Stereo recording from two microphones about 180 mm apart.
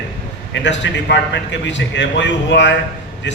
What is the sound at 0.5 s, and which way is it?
A man's voice, 85° left.